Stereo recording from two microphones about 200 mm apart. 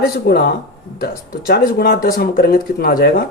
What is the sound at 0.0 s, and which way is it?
Speech, 50° left (ahead or behind).